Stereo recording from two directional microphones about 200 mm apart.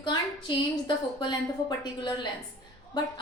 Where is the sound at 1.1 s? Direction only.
20° left (ahead or behind).